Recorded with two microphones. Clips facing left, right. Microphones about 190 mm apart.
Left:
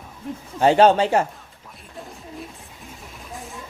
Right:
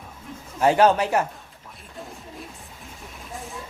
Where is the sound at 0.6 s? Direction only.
30° left (ahead or behind).